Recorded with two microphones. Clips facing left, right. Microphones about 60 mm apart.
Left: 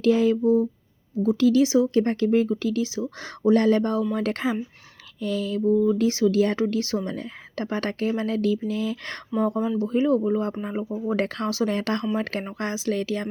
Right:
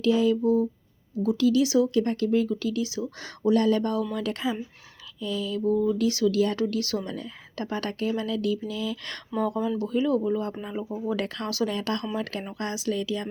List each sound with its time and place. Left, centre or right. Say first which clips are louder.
0.0 s speech: left 2 dB; left
0.4 s speech: left 3 dB; left
10.8 s speech: left 2 dB; centre
11.1 s speech: left 5 dB; left
12.5 s speech: left 1 dB; left
12.9 s speech: left 2 dB; left